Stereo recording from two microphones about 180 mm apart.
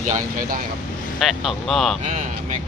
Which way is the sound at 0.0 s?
45° right (ahead or behind).